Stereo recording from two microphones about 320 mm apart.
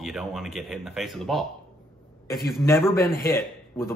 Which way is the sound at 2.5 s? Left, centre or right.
Centre.